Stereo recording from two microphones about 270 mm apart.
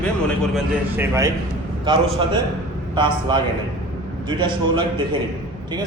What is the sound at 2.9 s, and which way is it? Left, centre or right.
A man's voice, centre.